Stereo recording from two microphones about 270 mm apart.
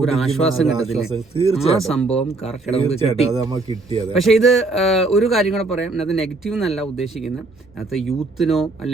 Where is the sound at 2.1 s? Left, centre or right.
Left.